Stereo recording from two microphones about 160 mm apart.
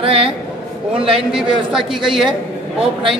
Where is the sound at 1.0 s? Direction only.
5° right (ahead or behind).